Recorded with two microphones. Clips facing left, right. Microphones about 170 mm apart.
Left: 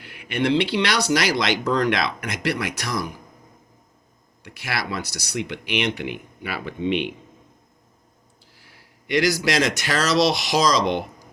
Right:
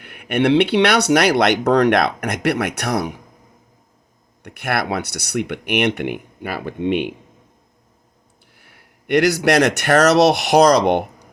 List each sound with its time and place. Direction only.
0.0 s speech: 60° right (ahead or behind)
4.4 s speech: 55° right (ahead or behind)
8.5 s speech: 60° right (ahead or behind)